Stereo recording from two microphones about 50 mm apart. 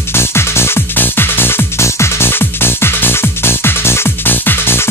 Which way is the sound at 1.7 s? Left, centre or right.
Left.